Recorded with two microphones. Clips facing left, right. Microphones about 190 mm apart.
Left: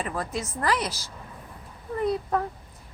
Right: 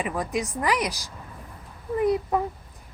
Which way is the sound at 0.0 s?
15° right (ahead or behind).